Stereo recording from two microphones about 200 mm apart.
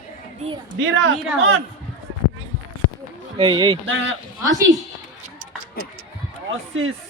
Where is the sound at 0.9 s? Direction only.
80° right.